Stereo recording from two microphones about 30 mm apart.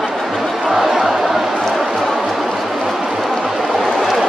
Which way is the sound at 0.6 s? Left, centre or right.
Centre.